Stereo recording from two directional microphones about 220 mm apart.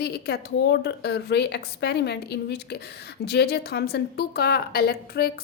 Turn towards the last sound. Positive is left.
turn(degrees=45)  # may be behind; listen again after turning